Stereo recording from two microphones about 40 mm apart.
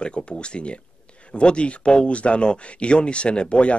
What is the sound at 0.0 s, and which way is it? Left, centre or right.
Speech, left.